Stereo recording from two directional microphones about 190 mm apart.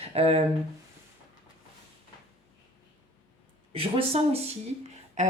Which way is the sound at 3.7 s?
30° right (ahead or behind).